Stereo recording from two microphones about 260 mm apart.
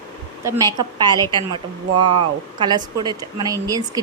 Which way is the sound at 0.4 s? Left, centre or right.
Centre.